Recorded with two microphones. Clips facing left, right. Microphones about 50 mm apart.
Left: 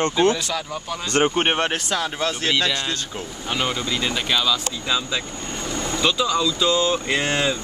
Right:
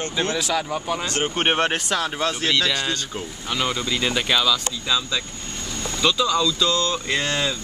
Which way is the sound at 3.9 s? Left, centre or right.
Centre.